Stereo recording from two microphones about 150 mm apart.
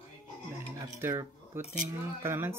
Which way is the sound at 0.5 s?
20° right (ahead or behind).